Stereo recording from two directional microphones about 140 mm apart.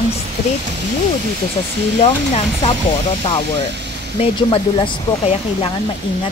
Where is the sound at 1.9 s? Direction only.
40° left (ahead or behind).